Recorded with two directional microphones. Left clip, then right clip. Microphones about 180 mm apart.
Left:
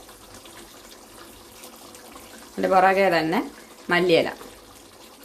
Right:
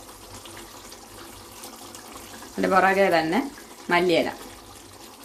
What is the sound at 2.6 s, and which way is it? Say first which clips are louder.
Speech: left 1 dB; 10° left (ahead or behind).